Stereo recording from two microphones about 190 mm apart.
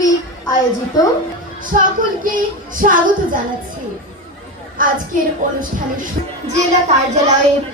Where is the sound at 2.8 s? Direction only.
45° right (ahead or behind).